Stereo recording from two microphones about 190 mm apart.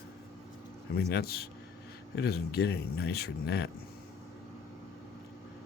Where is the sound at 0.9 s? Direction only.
55° left (ahead or behind).